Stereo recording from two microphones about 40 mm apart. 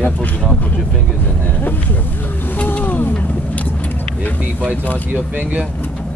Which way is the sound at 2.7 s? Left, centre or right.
Left.